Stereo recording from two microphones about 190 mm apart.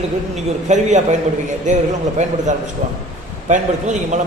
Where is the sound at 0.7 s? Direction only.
40° right (ahead or behind).